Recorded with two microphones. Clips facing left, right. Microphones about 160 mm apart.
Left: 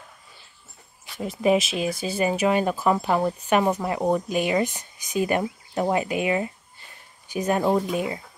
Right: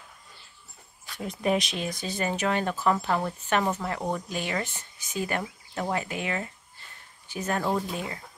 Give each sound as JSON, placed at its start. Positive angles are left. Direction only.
{"t": 1.1, "sound": "speech", "side_deg": 0}